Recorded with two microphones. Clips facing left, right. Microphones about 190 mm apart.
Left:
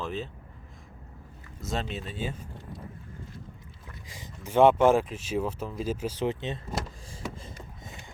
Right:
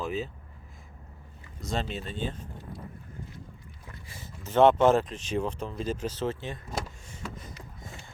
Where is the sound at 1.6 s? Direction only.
Centre (ahead or behind).